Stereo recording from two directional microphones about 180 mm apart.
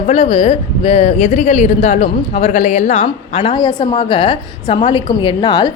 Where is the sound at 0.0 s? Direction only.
35° left (ahead or behind).